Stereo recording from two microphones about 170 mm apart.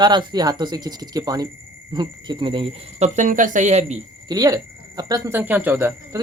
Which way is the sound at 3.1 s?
45° right (ahead or behind).